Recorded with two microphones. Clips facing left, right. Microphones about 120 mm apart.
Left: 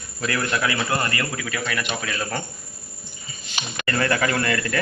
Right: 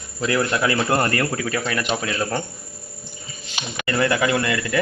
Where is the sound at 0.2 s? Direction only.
25° right (ahead or behind).